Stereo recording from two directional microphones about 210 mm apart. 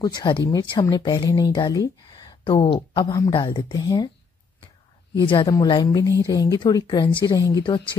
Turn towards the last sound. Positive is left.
turn(degrees=20)  # may be behind; listen again after turning